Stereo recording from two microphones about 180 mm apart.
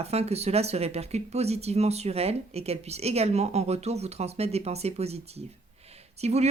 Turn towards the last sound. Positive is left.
turn(degrees=-35)  # may be behind; listen again after turning